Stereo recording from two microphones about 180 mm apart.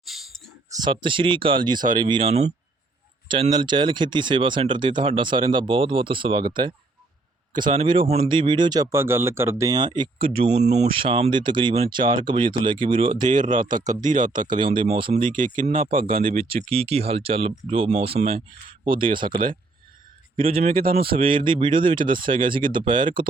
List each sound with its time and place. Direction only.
0.0 s clicking: centre (ahead or behind)
0.7 s speech: 25° right (ahead or behind)
13.2 s speech: 45° right (ahead or behind)
14.4 s speech: 25° right (ahead or behind)
15.4 s speech: 45° right (ahead or behind)
16.7 s speech: 35° right (ahead or behind)
20.7 s speech: 55° right (ahead or behind)
21.1 s speech: 30° right (ahead or behind)